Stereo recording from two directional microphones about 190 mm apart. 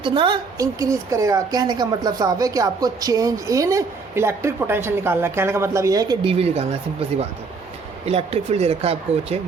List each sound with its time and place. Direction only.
0.0 s a woman's voice: 25° right (ahead or behind)
8.0 s speech: 30° right (ahead or behind)